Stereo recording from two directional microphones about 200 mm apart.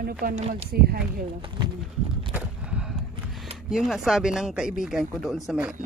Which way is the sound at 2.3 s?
5° right (ahead or behind).